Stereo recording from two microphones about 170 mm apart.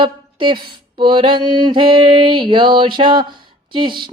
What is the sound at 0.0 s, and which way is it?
Music, 30° right (ahead or behind).